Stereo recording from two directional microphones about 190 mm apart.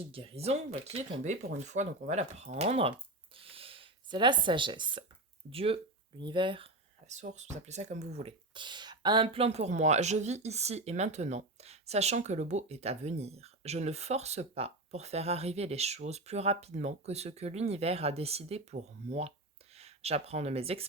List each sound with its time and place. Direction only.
0.1 s speech: 30° right (ahead or behind)
3.3 s a sound: 30° right (ahead or behind)
5.5 s speech: 30° right (ahead or behind)
7.1 s speech: 40° right (ahead or behind)